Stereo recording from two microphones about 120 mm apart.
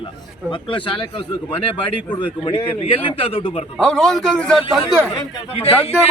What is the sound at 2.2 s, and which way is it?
A man's voice, 40° left (ahead or behind).